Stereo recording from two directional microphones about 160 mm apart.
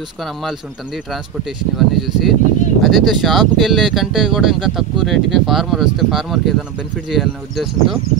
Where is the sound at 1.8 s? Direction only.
Centre (ahead or behind).